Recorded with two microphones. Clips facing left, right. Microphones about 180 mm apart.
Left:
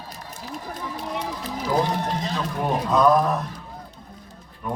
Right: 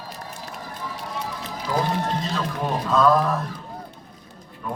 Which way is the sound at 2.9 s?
15° left (ahead or behind).